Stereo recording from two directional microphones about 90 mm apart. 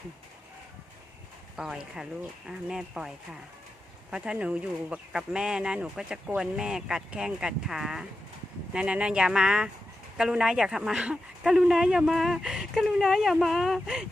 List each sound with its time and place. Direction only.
1.5 s speech: 5° right (ahead or behind)
4.2 s speech: 15° right (ahead or behind)